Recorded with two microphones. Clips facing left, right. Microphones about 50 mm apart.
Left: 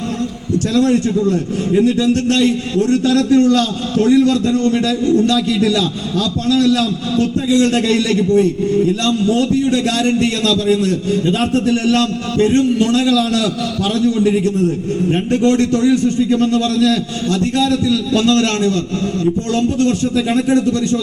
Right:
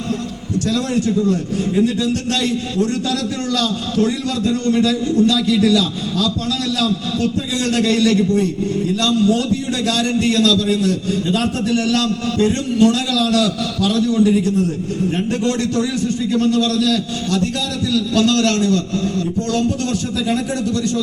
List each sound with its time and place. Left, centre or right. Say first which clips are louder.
0.7 s a man's voice: left 4 dB; left
15.1 s a man's voice: left 7 dB; left